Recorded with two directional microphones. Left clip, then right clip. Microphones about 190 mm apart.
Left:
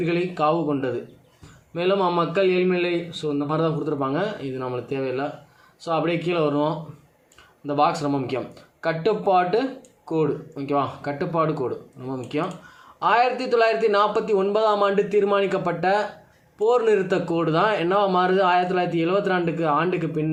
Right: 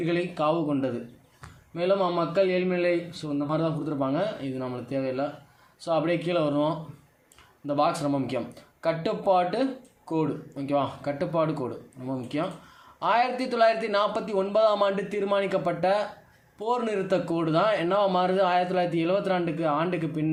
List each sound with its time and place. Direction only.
0.0 s a man's voice: 15° right (ahead or behind)